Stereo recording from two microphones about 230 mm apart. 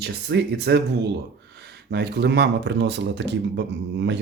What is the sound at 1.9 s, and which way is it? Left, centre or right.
Speech, right.